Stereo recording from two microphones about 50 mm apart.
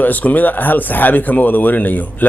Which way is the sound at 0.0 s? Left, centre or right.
Left.